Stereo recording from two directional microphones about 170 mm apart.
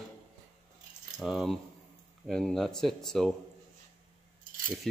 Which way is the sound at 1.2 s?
Centre (ahead or behind).